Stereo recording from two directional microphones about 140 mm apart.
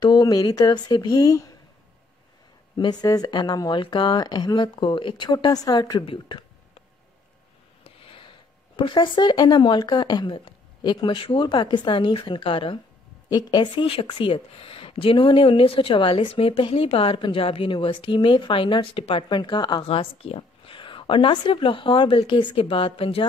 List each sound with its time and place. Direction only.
0.0 s speech: 30° left (ahead or behind)
2.8 s speech: 30° left (ahead or behind)
7.8 s speech: 40° left (ahead or behind)
19.9 s speech: 45° left (ahead or behind)